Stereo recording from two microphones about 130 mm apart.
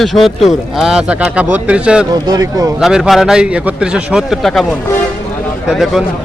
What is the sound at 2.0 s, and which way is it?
Speech, 30° right (ahead or behind).